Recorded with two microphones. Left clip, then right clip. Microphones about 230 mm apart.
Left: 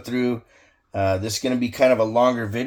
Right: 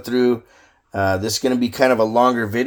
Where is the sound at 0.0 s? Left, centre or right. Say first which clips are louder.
Right 7 dB; right.